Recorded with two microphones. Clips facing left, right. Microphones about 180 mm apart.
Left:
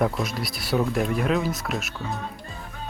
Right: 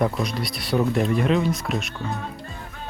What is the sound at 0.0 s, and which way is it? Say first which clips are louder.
Speech: right 1 dB; centre (ahead or behind).